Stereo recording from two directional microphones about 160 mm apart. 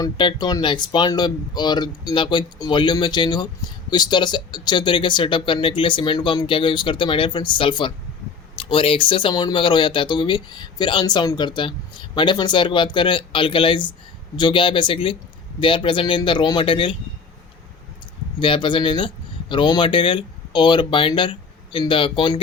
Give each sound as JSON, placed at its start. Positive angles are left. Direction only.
{"t": 0.0, "sound": "speech", "side_deg": 30}
{"t": 18.3, "sound": "speech", "side_deg": 30}